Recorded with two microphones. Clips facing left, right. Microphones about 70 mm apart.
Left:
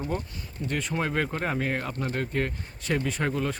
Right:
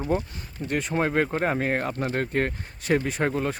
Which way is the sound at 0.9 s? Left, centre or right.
Right.